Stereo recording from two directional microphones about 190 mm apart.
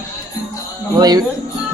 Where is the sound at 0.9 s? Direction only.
20° right (ahead or behind).